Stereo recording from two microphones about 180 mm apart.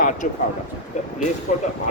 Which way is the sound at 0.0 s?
45° left (ahead or behind).